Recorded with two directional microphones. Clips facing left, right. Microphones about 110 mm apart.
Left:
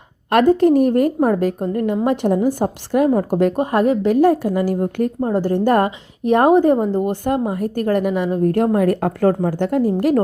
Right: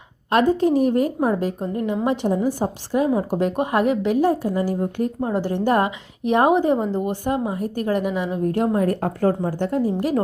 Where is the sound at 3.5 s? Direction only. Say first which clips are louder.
Left 3 dB; 40° left (ahead or behind).